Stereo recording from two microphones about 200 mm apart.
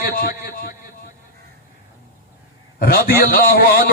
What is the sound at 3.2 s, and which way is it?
Speech, 45° left (ahead or behind).